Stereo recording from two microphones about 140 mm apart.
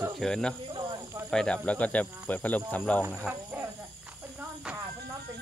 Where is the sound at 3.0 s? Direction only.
15° right (ahead or behind).